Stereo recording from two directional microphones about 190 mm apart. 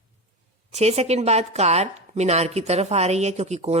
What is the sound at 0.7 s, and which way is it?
Speech, 35° right (ahead or behind).